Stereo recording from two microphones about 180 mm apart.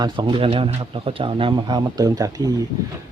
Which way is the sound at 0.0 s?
25° right (ahead or behind).